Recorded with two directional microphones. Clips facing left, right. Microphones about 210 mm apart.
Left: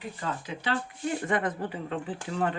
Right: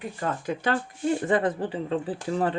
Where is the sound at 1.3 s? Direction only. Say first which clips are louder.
Right 5 dB; 30° right (ahead or behind).